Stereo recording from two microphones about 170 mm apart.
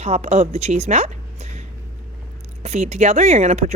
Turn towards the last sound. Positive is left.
turn(degrees=-40)  # may be behind; listen again after turning